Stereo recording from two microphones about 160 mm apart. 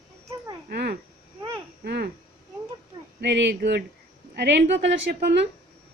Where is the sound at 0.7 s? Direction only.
90° right.